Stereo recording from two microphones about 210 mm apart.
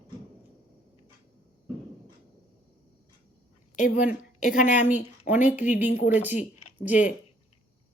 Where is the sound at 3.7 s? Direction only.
35° left (ahead or behind).